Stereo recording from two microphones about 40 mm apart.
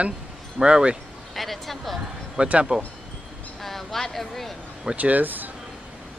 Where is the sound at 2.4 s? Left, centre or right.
Right.